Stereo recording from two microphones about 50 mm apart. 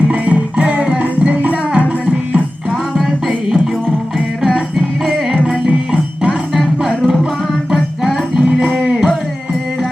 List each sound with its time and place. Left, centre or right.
0.1 s music: right
2.9 s music: centre
5.5 s music: centre
7.7 s music: centre